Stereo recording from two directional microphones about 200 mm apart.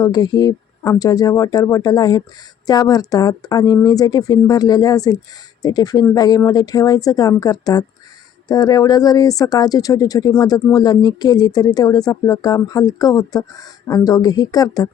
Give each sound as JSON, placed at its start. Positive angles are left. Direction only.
{"t": 0.0, "sound": "speech", "side_deg": 20}